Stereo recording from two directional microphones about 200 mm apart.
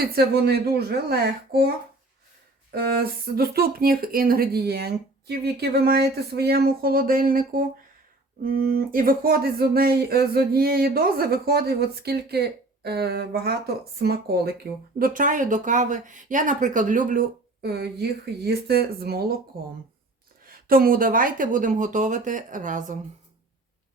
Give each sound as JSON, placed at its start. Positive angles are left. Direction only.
{"t": 0.0, "sound": "speech", "side_deg": -50}
{"t": 2.7, "sound": "speech", "side_deg": -50}
{"t": 20.4, "sound": "speech", "side_deg": -45}